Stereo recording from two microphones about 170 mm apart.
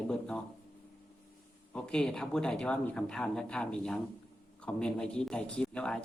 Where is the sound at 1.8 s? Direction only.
5° left (ahead or behind).